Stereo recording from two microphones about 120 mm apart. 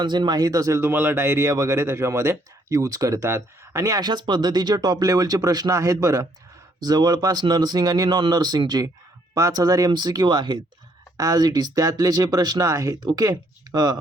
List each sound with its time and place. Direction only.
0.0 s speech: 40° right (ahead or behind)